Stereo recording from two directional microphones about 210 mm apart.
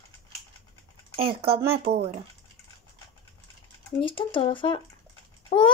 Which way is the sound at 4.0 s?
25° left (ahead or behind).